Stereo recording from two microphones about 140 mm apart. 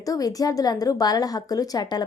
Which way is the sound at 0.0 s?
25° left (ahead or behind).